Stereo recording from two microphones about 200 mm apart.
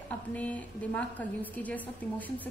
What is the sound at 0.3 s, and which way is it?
A woman's voice, 5° left (ahead or behind).